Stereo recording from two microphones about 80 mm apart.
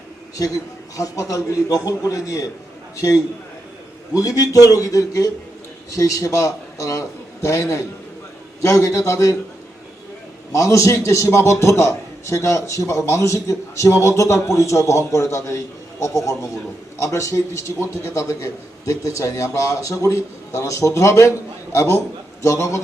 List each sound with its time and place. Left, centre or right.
0.9 s a man's voice: left
4.1 s a man's voice: left
10.5 s a man's voice: left